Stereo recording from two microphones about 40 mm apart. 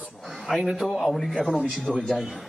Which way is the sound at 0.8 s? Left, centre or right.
Centre.